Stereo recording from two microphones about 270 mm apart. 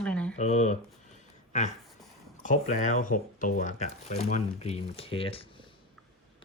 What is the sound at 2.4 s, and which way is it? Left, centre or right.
Speech, left.